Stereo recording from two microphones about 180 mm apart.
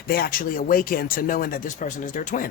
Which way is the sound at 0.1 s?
55° left (ahead or behind).